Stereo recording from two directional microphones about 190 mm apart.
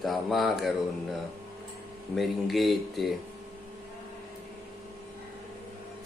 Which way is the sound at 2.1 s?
Centre (ahead or behind).